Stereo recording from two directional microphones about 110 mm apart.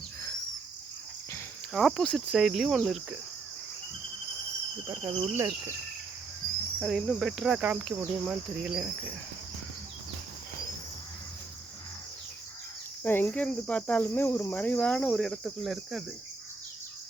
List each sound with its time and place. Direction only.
1.7 s cricket: 5° left (ahead or behind)
4.9 s speech: 20° right (ahead or behind)
6.7 s cricket: 5° left (ahead or behind)
13.0 s insect: 20° left (ahead or behind); by 16.0 s centre (ahead or behind)